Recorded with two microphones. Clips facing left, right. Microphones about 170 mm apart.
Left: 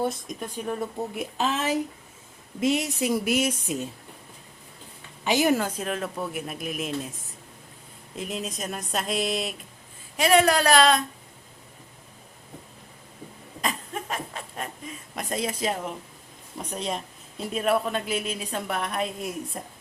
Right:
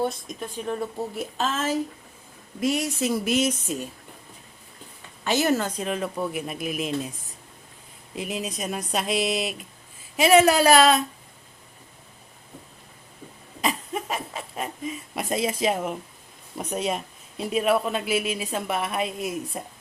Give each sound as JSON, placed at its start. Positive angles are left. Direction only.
{"t": 0.0, "sound": "speech", "side_deg": 0}
{"t": 0.5, "sound": "speech", "side_deg": 10}
{"t": 5.2, "sound": "speech", "side_deg": 15}
{"t": 13.6, "sound": "a sound", "side_deg": -10}
{"t": 15.1, "sound": "speech", "side_deg": -10}